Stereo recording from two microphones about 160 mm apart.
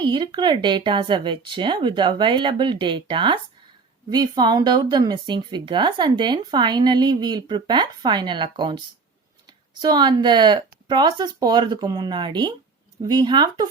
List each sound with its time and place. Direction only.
0.0 s speech: 30° right (ahead or behind)
9.8 s speech: 25° right (ahead or behind)